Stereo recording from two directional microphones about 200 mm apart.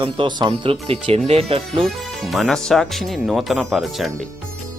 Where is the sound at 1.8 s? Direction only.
Centre (ahead or behind).